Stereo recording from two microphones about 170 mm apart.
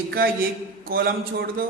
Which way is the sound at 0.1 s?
60° right (ahead or behind).